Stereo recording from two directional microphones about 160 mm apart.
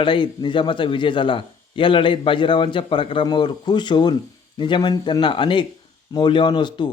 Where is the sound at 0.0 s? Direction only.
30° left (ahead or behind).